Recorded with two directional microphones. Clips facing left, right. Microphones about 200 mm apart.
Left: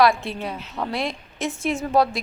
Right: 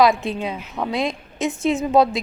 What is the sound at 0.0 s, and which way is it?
A woman's voice, 20° right (ahead or behind).